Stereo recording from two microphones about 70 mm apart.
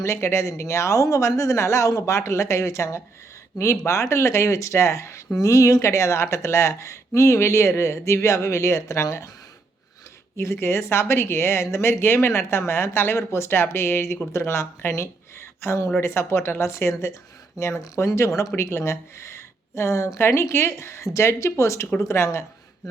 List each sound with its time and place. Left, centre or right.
0.0 s speech: left
10.3 s speech: left